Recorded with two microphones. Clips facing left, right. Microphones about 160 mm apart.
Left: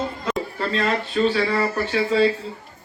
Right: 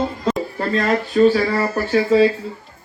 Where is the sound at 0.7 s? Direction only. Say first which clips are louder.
Right 5 dB; 45° right (ahead or behind).